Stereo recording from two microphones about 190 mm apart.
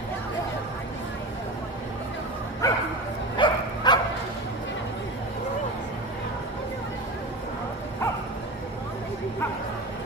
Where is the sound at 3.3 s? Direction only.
25° left (ahead or behind).